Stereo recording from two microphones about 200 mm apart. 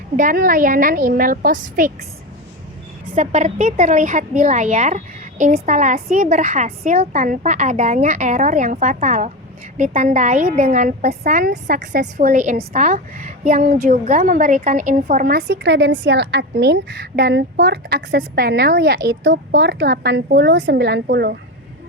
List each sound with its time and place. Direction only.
0.2 s a woman's voice: 45° right (ahead or behind)
3.2 s a woman's voice: 35° right (ahead or behind)
11.5 s speech: 60° right (ahead or behind)
12.1 s a woman's voice: 40° right (ahead or behind)